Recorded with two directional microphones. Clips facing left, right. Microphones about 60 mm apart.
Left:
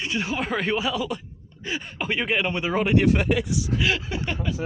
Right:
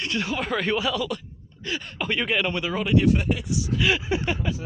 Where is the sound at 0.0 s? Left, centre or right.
Centre.